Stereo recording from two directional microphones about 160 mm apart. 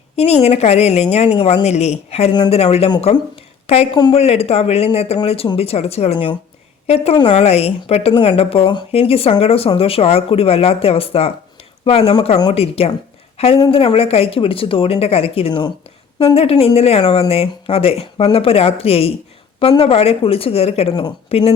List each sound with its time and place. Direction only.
0.2 s a woman's voice: 40° left (ahead or behind)